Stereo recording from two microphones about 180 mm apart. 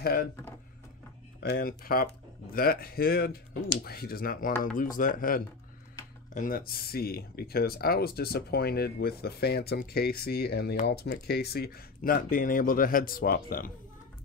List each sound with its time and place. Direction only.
0.0 s speech: 55° left (ahead or behind)
1.4 s speech: 55° left (ahead or behind)